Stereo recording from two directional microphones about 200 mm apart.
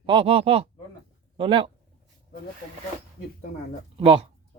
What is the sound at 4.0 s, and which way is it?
Speech, 25° right (ahead or behind).